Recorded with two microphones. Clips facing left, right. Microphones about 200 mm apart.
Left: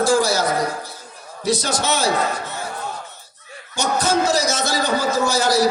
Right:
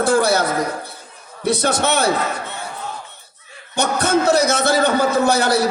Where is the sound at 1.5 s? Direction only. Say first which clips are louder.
Right 3 dB; 60° right (ahead or behind).